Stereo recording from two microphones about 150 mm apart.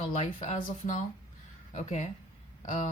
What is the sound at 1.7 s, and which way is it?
Speech, 50° left (ahead or behind).